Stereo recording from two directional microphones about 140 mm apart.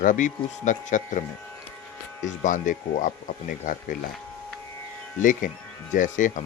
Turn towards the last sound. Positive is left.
turn(degrees=65)  # may be behind; listen again after turning